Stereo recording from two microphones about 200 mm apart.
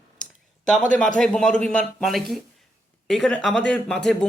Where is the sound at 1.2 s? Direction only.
5° left (ahead or behind).